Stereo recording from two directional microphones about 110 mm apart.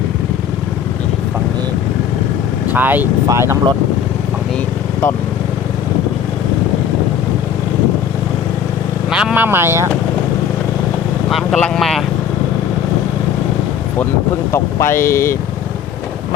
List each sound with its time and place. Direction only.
2.6 s speech: 15° right (ahead or behind)
9.0 s speech: 5° right (ahead or behind); by 9.9 s 25° right (ahead or behind)
11.5 s speech: 5° left (ahead or behind)
14.5 s speech: 25° left (ahead or behind)